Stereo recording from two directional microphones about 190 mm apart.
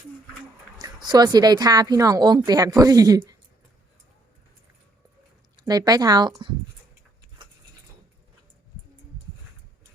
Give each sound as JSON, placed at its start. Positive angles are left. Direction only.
{"t": 0.8, "sound": "speech", "side_deg": -20}
{"t": 5.6, "sound": "speech", "side_deg": -20}